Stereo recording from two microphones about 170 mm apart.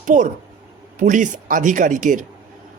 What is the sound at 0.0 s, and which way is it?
Speech, 45° right (ahead or behind).